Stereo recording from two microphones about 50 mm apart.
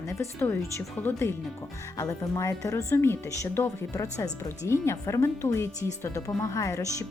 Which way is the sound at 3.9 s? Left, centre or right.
Left.